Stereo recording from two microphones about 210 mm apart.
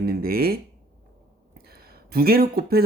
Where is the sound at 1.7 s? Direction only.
45° right (ahead or behind).